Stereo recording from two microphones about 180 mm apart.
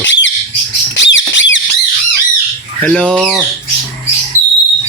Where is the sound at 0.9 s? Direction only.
85° left.